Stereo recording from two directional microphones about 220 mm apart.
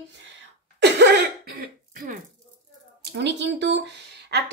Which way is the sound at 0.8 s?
50° right (ahead or behind).